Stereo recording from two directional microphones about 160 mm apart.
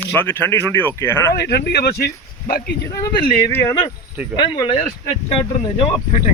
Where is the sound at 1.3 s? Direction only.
90° left.